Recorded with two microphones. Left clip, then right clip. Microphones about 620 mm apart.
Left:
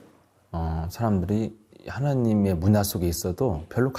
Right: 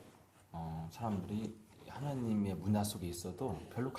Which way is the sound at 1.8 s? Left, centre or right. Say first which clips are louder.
Left 15 dB; left.